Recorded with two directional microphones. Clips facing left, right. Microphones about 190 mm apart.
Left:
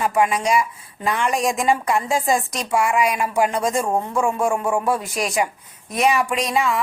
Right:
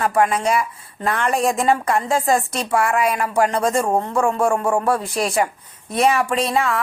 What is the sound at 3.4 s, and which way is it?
Speech, 5° left (ahead or behind).